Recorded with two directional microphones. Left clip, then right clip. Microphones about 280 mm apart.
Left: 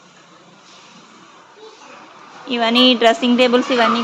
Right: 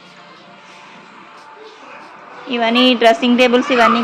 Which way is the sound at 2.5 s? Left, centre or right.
Centre.